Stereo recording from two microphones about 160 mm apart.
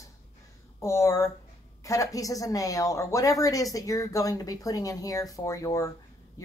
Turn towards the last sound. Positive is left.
turn(degrees=20)  # may be behind; listen again after turning